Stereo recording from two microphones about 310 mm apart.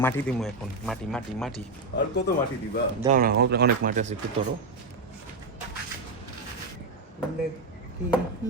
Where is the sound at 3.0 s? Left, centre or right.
Right.